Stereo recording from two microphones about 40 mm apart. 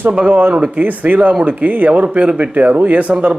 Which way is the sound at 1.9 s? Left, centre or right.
Right.